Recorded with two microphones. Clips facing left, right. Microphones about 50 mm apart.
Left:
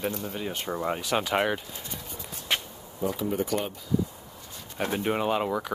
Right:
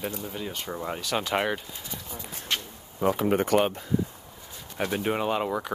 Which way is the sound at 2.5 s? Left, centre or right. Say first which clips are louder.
Left 2 dB; centre.